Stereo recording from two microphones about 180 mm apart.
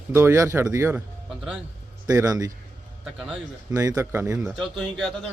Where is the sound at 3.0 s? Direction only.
5° right (ahead or behind).